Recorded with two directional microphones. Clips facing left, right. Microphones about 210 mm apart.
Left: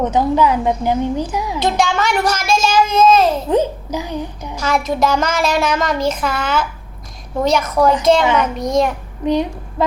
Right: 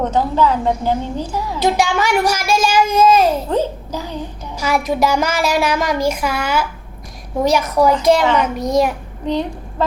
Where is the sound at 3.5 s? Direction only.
15° left (ahead or behind).